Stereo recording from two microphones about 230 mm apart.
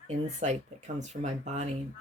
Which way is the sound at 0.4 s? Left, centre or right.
Right.